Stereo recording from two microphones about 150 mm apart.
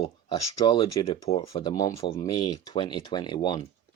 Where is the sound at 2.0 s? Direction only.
35° left (ahead or behind).